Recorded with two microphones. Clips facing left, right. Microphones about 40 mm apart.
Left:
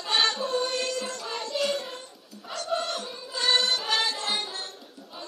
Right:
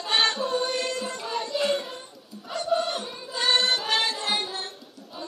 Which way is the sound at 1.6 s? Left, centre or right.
Centre.